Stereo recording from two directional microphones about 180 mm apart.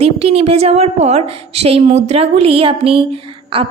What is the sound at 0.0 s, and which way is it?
A woman's voice, 35° right (ahead or behind).